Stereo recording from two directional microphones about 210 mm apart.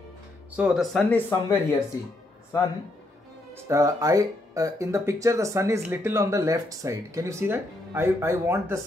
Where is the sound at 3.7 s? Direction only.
15° right (ahead or behind).